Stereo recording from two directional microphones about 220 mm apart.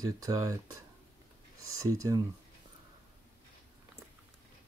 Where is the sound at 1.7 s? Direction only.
15° right (ahead or behind).